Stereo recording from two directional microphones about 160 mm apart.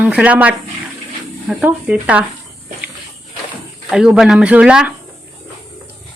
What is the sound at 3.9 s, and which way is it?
Speech, 5° right (ahead or behind).